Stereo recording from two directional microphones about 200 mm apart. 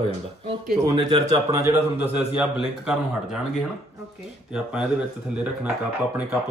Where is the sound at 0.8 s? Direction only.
20° right (ahead or behind); by 3.7 s centre (ahead or behind).